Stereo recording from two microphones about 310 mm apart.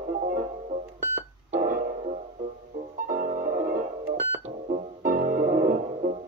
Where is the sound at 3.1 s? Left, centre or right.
Right.